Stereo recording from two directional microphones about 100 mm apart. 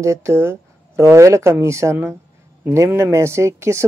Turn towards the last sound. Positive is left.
turn(degrees=-25)  # may be behind; listen again after turning